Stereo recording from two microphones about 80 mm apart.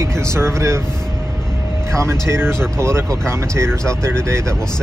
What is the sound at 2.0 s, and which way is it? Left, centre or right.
Speech, right.